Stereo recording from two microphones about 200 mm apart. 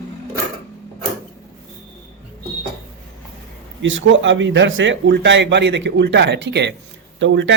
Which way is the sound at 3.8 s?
70° right (ahead or behind).